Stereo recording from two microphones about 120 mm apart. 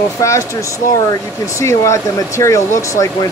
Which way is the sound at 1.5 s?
25° left (ahead or behind).